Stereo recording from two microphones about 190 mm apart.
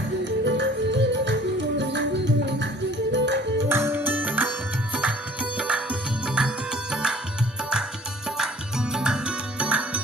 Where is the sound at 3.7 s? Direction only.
10° right (ahead or behind).